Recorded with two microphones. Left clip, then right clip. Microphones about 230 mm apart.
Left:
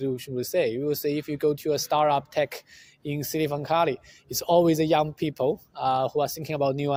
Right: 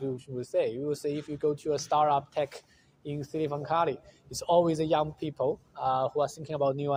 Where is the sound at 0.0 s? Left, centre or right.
Left.